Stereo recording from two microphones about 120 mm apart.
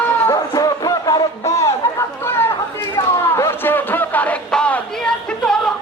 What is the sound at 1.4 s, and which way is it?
Chatter, 25° left (ahead or behind).